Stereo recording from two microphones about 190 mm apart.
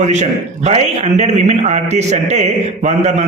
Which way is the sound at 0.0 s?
40° right (ahead or behind).